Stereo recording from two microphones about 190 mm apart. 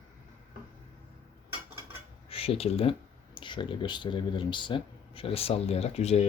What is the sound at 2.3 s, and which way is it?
Speech, 30° left (ahead or behind).